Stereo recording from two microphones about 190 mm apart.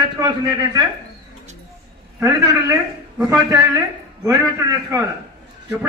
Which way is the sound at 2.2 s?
20° right (ahead or behind).